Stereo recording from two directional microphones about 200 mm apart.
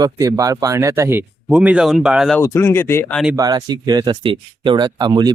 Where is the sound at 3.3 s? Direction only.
20° right (ahead or behind).